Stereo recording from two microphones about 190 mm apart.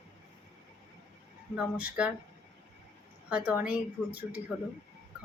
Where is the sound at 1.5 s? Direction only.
5° right (ahead or behind).